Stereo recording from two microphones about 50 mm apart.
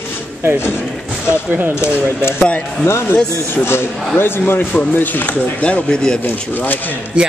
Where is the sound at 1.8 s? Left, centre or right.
Left.